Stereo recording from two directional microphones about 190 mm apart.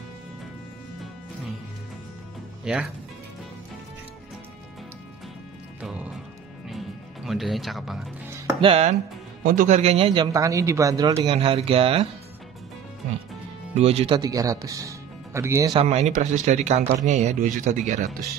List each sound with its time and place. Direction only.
2.6 s speech: 5° right (ahead or behind)
5.8 s music: 5° right (ahead or behind)
7.2 s speech: centre (ahead or behind)
8.5 s speech: 30° right (ahead or behind)
9.4 s speech: 45° right (ahead or behind); by 11.1 s 20° right (ahead or behind)
11.1 s speech: 30° right (ahead or behind)
13.7 s speech: 35° right (ahead or behind); by 15.8 s 15° right (ahead or behind)
15.8 s speech: 35° right (ahead or behind)